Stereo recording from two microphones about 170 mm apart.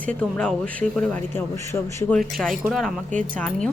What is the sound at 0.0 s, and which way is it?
A man's voice, 5° left (ahead or behind).